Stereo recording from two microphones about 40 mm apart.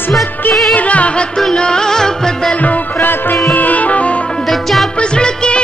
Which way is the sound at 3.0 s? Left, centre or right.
Left.